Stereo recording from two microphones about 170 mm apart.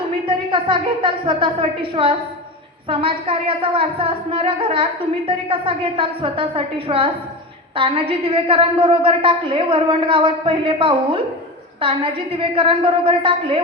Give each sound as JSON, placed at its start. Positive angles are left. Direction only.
{"t": 0.3, "sound": "a woman's voice", "side_deg": -30}